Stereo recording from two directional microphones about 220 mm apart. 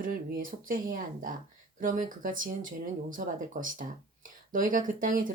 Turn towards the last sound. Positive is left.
turn(degrees=-40)  # may be behind; listen again after turning